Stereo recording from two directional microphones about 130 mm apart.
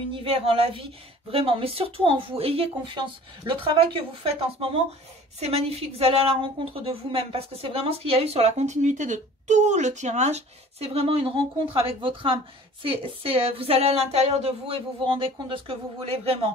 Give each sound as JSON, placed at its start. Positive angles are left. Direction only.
{"t": 0.1, "sound": "a woman's voice", "side_deg": -45}